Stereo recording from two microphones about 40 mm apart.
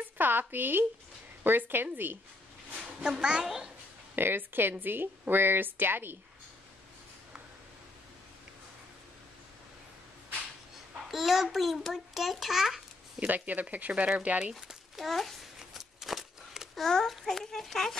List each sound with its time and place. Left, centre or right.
0.2 s speech: right
2.7 s a sound: right
3.4 s a child's voice: centre
4.1 s speech: right
11.1 s a child's voice: centre
13.3 s speech: right
15.0 s a child's voice: centre
15.7 s a sound: centre
16.8 s speech: centre